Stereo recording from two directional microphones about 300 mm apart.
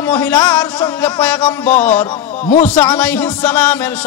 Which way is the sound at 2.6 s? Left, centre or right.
Centre.